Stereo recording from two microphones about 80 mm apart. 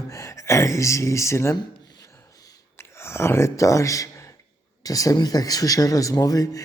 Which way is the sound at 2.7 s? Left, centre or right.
Left.